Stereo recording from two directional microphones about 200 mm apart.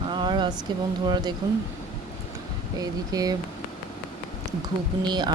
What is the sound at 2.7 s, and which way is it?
Speech, 20° right (ahead or behind).